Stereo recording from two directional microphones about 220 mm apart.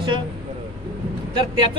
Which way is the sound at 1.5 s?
20° right (ahead or behind).